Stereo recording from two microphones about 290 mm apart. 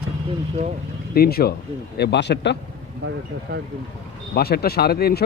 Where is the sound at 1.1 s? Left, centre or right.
Left.